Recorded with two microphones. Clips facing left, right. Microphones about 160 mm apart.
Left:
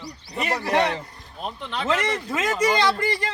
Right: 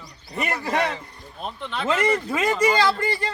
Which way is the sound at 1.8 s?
10° right (ahead or behind).